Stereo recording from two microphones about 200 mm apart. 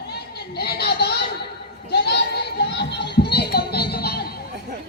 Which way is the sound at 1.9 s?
55° left (ahead or behind).